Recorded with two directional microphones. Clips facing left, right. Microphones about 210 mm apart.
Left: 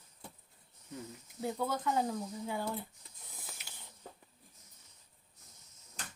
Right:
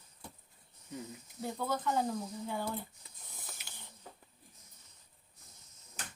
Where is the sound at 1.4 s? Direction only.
5° left (ahead or behind).